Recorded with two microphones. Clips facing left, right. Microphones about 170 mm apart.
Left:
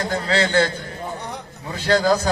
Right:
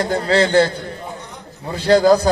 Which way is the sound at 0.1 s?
35° right (ahead or behind).